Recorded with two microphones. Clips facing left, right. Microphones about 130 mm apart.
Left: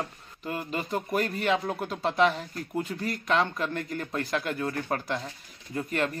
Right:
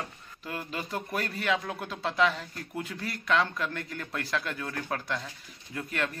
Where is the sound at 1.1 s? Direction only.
40° left (ahead or behind).